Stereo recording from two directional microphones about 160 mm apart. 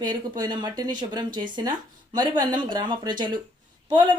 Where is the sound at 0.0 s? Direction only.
25° right (ahead or behind).